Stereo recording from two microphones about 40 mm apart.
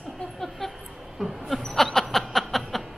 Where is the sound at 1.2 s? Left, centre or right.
Centre.